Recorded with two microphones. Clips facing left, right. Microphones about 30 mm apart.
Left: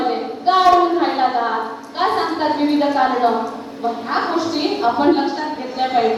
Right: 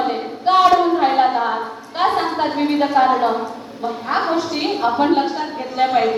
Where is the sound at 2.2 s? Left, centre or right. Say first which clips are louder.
Left 1 dB; centre.